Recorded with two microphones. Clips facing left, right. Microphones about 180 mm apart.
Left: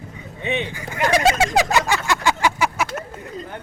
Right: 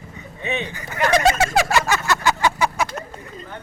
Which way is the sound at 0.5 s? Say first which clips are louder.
Left 1 dB; 10° left (ahead or behind).